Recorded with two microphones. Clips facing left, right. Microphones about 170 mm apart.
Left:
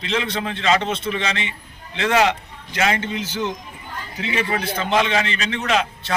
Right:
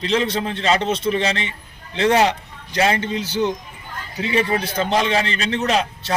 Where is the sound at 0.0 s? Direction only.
40° right (ahead or behind).